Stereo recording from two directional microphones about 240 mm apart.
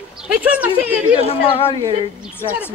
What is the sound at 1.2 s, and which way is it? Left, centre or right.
Speech, left.